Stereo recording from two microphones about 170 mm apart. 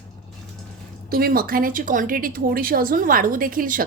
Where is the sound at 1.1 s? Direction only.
60° right (ahead or behind).